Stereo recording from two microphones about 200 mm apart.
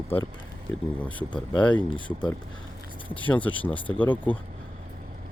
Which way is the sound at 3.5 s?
25° left (ahead or behind).